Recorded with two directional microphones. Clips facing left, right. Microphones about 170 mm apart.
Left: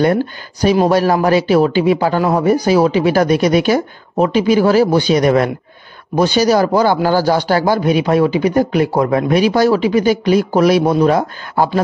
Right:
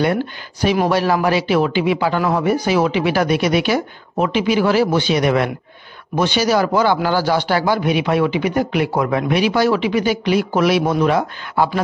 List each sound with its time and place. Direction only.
0.0 s a man's voice: 40° left (ahead or behind)